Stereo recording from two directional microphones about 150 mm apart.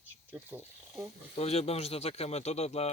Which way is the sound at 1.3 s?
45° left (ahead or behind).